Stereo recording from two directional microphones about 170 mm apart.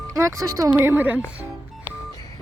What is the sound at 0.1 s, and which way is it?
Speech, 20° right (ahead or behind).